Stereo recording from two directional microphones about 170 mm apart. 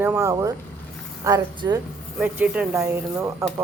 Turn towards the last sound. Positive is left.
turn(degrees=-15)  # may be behind; listen again after turning